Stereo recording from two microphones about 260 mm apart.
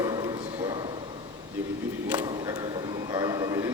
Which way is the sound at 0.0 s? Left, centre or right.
Centre.